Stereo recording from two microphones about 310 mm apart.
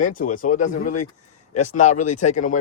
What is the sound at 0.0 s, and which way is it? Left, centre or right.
Speech, left.